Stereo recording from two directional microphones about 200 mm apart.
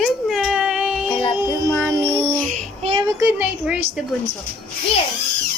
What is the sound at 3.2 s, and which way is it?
Speech, 10° right (ahead or behind).